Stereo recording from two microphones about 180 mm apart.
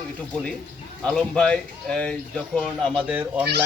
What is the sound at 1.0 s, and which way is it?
Speech, 5° left (ahead or behind).